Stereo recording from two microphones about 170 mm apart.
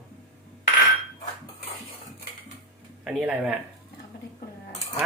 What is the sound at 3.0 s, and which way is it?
Speech, 5° right (ahead or behind).